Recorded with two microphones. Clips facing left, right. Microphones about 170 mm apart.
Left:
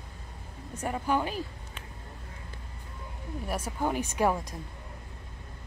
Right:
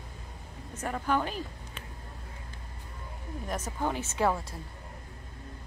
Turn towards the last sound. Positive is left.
turn(degrees=15)  # may be behind; listen again after turning